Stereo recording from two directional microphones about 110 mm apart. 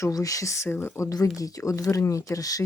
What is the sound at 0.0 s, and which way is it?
Speech, 30° left (ahead or behind).